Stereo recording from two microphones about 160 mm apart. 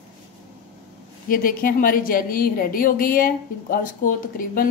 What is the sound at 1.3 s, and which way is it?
A woman's voice, 60° left (ahead or behind).